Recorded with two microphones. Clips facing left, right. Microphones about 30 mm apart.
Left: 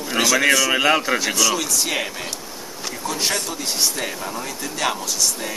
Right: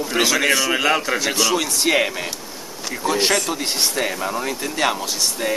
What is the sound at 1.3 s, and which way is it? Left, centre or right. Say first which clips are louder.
Speech: right 1 dB; right.